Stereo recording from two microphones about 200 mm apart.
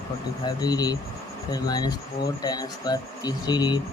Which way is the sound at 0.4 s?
20° left (ahead or behind).